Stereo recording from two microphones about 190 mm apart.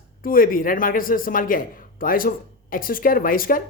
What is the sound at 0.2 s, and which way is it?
Speech, 50° left (ahead or behind).